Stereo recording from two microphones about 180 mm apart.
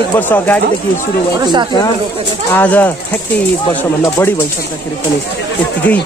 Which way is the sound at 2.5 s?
10° left (ahead or behind).